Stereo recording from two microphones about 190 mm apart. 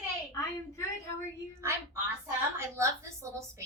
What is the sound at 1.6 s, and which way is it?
A woman's voice, 15° right (ahead or behind).